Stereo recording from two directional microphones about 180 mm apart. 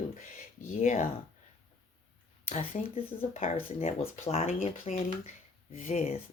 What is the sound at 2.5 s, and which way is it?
Speech, 35° left (ahead or behind).